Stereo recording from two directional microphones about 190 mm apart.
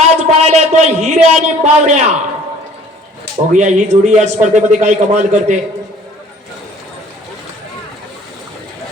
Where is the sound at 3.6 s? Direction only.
40° right (ahead or behind).